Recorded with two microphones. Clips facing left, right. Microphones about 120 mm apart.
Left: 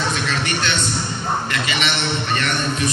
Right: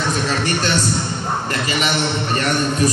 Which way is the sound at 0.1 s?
40° right (ahead or behind).